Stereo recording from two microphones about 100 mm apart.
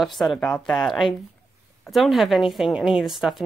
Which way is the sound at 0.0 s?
Centre (ahead or behind).